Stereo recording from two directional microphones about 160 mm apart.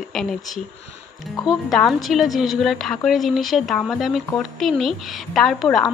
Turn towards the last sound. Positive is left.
turn(degrees=0)  # may be behind; listen again after turning